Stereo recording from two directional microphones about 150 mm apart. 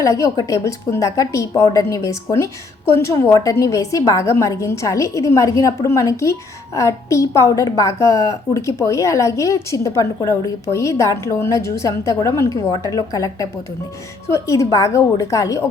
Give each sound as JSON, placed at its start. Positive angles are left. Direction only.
{"t": 0.0, "sound": "a woman's voice", "side_deg": 20}